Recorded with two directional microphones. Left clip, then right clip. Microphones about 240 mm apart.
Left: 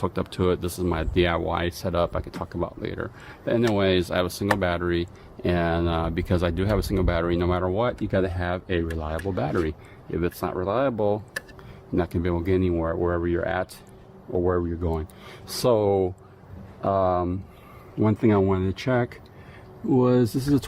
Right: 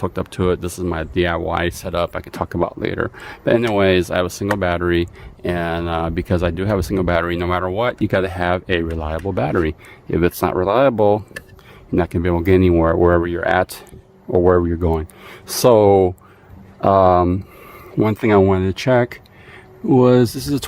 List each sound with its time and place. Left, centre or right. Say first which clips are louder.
0.0 s speech: right 5 dB; right